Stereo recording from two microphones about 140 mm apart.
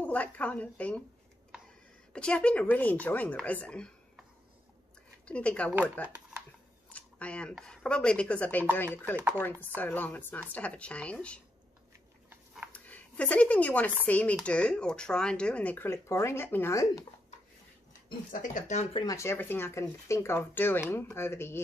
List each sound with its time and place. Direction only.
0.0 s speech: 10° left (ahead or behind)
2.1 s speech: 5° left (ahead or behind)
5.2 s speech: 10° left (ahead or behind)
6.9 s a sound: 10° left (ahead or behind)
7.5 s speech: 5° left (ahead or behind)
12.7 s speech: 10° left (ahead or behind)
18.3 s speech: 65° left (ahead or behind)
18.9 s speech: 25° left (ahead or behind)